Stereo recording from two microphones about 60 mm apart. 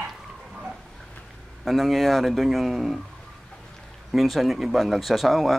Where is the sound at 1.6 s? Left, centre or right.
Centre.